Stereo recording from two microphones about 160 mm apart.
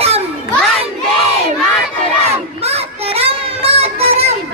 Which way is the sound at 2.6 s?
40° right (ahead or behind).